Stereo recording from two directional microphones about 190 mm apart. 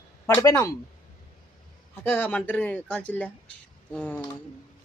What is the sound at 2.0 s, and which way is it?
A man's voice, 10° left (ahead or behind).